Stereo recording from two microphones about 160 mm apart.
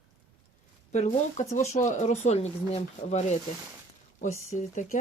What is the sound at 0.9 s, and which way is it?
Speech, 50° left (ahead or behind).